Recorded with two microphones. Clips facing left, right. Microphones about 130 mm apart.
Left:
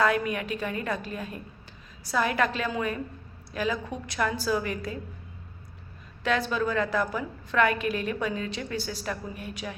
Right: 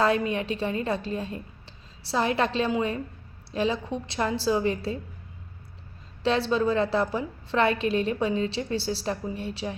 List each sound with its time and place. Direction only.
0.0 s a woman's voice: 30° right (ahead or behind)
6.2 s a woman's voice: 30° right (ahead or behind)